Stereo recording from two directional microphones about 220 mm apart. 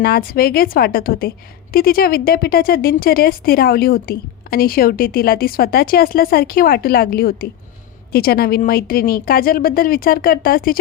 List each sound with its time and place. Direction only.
0.0 s a woman's voice: 40° left (ahead or behind)